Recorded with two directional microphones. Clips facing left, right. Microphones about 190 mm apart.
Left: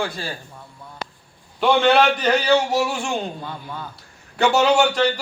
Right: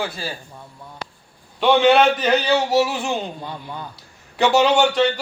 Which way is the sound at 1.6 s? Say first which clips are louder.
Right 2 dB; centre (ahead or behind).